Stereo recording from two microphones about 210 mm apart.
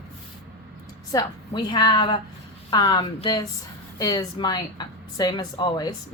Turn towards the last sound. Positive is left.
turn(degrees=20)  # may be behind; listen again after turning